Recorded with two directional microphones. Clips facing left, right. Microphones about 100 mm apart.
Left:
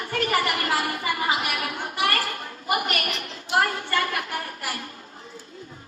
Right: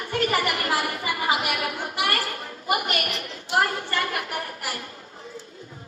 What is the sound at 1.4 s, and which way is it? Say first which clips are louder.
Speech: right 1 dB; 30° right (ahead or behind).